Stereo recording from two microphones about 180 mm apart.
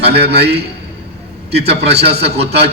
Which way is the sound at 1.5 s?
35° right (ahead or behind).